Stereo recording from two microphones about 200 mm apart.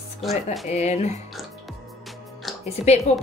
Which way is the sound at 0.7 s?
35° left (ahead or behind).